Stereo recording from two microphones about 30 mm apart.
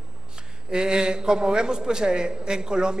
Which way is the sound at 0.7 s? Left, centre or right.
Right.